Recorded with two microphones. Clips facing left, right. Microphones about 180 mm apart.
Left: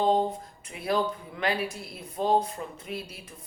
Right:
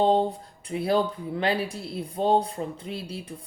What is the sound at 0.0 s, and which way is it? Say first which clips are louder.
Speech: right 3 dB; 30° right (ahead or behind).